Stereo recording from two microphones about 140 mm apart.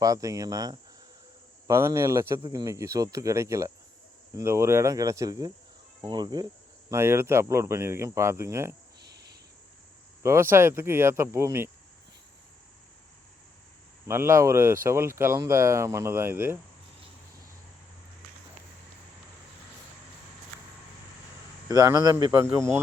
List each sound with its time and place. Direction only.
0.0 s speech: 25° right (ahead or behind)
6.9 s speech: 20° right (ahead or behind)
10.2 s speech: 15° right (ahead or behind)
14.1 s speech: 20° right (ahead or behind)
21.7 s speech: 25° right (ahead or behind)